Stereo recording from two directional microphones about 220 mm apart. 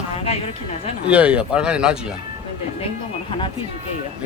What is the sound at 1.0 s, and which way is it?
Speech, 5° right (ahead or behind).